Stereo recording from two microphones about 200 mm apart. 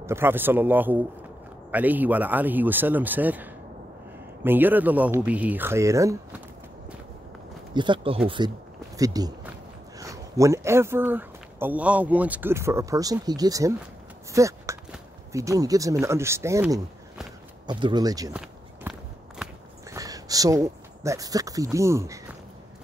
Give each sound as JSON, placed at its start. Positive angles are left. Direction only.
{"t": 0.0, "sound": "a man's voice", "side_deg": -10}
{"t": 7.7, "sound": "speech", "side_deg": -25}
{"t": 14.3, "sound": "a sound", "side_deg": -15}
{"t": 15.3, "sound": "a man's voice", "side_deg": -15}
{"t": 17.6, "sound": "speech", "side_deg": -25}
{"t": 18.3, "sound": "walk", "side_deg": -5}
{"t": 19.9, "sound": "speech", "side_deg": -15}